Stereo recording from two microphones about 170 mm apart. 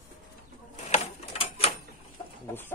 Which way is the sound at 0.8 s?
40° left (ahead or behind).